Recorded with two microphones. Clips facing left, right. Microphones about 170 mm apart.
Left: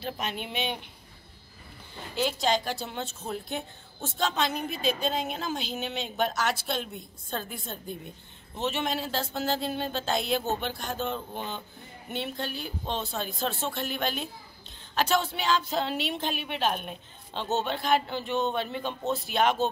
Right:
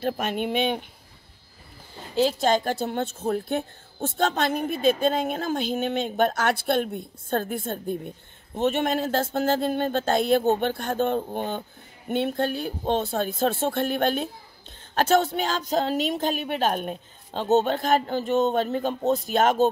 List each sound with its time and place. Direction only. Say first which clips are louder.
0.0 s a woman's voice: right 8 dB; 50° right (ahead or behind)
2.3 s a woman's voice: right 5 dB; 50° right (ahead or behind)